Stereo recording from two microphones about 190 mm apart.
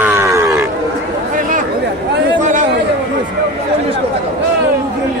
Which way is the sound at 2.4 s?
40° right (ahead or behind).